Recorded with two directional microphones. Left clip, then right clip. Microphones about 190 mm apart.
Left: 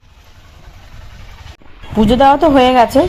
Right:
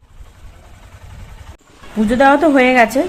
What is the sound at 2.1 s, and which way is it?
Speech, 20° left (ahead or behind).